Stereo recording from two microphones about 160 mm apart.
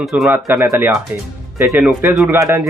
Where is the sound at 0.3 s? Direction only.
15° right (ahead or behind).